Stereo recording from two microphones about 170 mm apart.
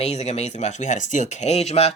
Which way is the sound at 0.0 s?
40° left (ahead or behind).